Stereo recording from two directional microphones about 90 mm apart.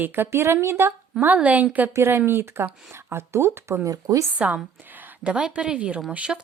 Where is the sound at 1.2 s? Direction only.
15° right (ahead or behind).